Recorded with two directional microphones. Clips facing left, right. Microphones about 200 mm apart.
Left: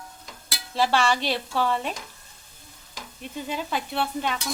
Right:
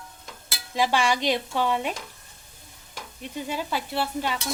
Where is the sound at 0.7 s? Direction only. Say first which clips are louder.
Left 1 dB; 15° right (ahead or behind).